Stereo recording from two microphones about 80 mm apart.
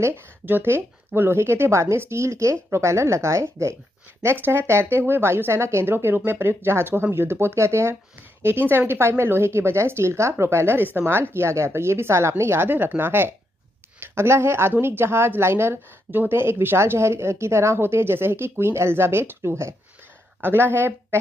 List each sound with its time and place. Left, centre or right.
0.0 s a woman's voice: right